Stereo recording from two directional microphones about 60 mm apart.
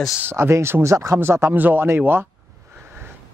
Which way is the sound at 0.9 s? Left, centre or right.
Right.